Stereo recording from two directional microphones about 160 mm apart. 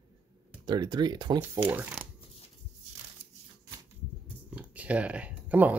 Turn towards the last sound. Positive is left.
turn(degrees=-10)  # may be behind; listen again after turning